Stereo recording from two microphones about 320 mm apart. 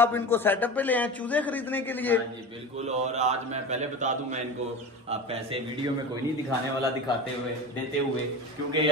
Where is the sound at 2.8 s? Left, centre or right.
Right.